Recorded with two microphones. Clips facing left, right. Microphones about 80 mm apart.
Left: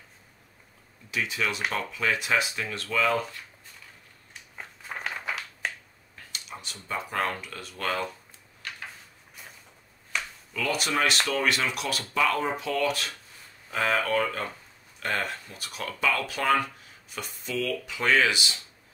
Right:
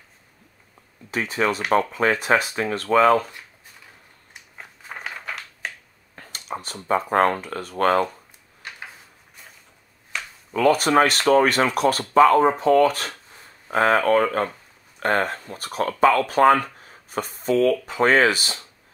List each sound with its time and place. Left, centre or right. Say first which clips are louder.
1.1 s speech: right 7 dB; right
4.6 s a sound: even; centre
6.1 s speech: right 9 dB; right
10.5 s speech: right 11 dB; right